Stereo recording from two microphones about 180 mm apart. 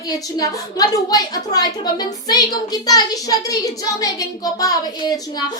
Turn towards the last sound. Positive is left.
turn(degrees=20)  # may be behind; listen again after turning